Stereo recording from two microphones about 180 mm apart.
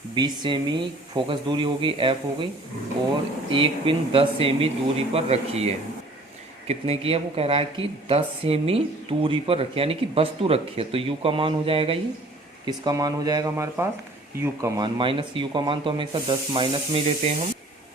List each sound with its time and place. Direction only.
0.1 s speech: 25° right (ahead or behind)
3.5 s speech: 30° right (ahead or behind)